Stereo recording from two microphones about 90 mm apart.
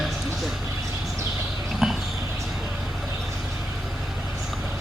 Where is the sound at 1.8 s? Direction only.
5° right (ahead or behind).